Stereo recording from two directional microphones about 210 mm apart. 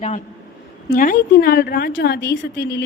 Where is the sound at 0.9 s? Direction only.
45° left (ahead or behind).